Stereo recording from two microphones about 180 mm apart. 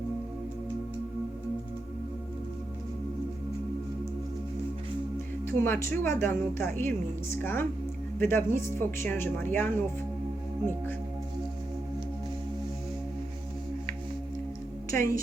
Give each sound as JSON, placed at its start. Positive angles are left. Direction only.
{"t": 5.5, "sound": "speech", "side_deg": 10}
{"t": 14.9, "sound": "speech", "side_deg": 15}